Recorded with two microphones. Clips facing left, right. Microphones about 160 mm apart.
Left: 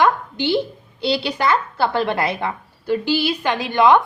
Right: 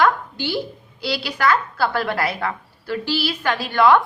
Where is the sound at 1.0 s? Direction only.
25° left (ahead or behind).